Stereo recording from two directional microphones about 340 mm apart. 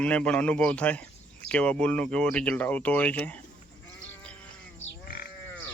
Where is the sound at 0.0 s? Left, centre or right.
Centre.